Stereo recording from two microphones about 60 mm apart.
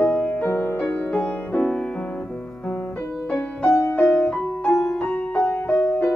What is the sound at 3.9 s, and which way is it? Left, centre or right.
Music, left.